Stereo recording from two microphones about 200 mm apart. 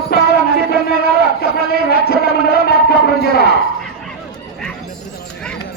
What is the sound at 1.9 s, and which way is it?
Speech, 50° left (ahead or behind).